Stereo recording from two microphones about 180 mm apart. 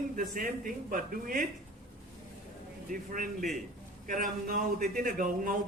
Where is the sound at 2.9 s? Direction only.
50° right (ahead or behind).